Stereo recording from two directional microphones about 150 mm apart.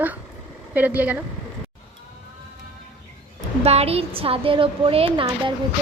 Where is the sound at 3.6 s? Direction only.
45° right (ahead or behind).